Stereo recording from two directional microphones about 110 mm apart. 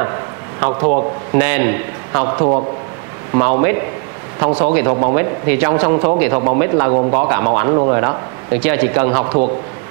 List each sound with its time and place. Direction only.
0.6 s a man's voice: 30° right (ahead or behind)
1.4 s a man's voice: 15° right (ahead or behind)
2.1 s a man's voice: 30° right (ahead or behind)